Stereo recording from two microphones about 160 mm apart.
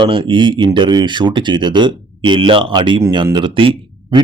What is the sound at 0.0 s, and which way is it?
Speech, 30° right (ahead or behind).